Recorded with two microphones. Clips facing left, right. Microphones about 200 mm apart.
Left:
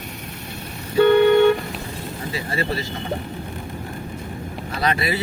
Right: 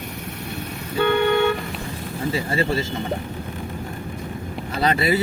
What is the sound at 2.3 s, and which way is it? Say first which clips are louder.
Speech: right 3 dB; 25° right (ahead or behind).